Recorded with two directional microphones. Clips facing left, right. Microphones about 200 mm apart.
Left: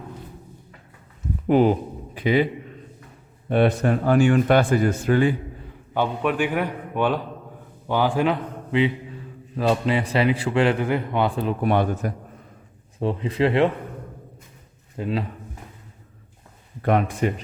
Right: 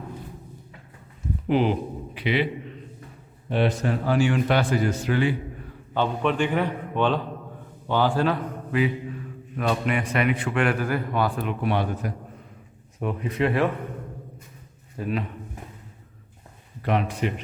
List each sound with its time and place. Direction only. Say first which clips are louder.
1.5 s a man's voice: left 4 dB; 45° left (ahead or behind)
3.5 s a man's voice: left 4 dB; 55° left (ahead or behind)
5.9 s a man's voice: left 1 dB; 10° left (ahead or behind)
11.6 s a man's voice: left 4 dB; 50° left (ahead or behind)
13.0 s speech: left 3 dB; 30° left (ahead or behind)
14.9 s speech: left 2 dB; 25° left (ahead or behind)
16.8 s a man's voice: left 4 dB; 50° left (ahead or behind)